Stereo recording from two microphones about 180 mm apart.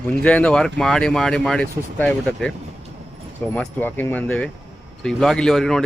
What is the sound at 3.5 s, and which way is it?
Speech, 10° left (ahead or behind).